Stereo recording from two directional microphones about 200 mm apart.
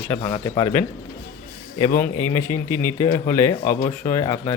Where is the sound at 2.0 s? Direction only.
15° left (ahead or behind).